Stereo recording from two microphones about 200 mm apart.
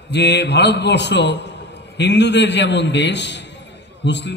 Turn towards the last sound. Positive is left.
turn(degrees=60)  # may be behind; listen again after turning